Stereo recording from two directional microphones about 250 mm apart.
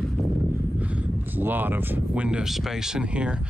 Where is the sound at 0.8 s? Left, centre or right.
Centre.